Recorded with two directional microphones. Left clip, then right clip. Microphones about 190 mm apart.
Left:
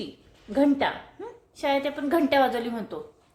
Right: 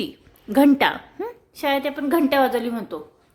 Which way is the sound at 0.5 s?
40° right (ahead or behind).